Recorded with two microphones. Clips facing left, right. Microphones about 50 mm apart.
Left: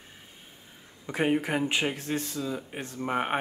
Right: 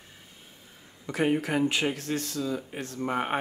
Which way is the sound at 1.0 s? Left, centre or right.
Centre.